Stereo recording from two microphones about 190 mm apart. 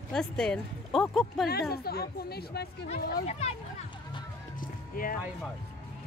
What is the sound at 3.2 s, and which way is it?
Speech, 35° left (ahead or behind).